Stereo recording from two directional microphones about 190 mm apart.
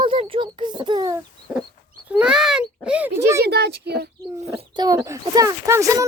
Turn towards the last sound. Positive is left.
turn(degrees=-15)  # may be behind; listen again after turning